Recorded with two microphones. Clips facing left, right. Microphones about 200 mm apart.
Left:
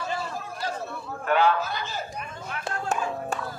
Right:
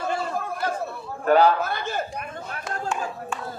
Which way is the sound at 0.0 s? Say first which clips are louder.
Right 5 dB; 60° right (ahead or behind).